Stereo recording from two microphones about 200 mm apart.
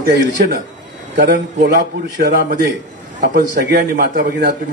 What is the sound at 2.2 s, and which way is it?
A man's voice, 50° right (ahead or behind).